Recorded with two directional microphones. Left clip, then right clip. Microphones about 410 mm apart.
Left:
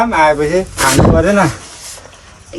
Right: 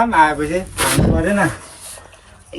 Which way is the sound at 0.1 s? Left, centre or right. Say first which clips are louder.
Left 3 dB; centre.